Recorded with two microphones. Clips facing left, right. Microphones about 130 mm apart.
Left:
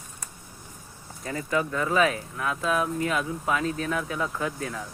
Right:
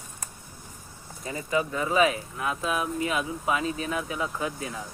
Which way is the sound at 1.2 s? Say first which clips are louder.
Even; 15° right (ahead or behind).